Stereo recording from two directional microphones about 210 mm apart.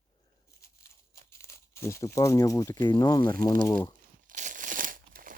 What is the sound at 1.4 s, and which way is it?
Speech, 10° left (ahead or behind).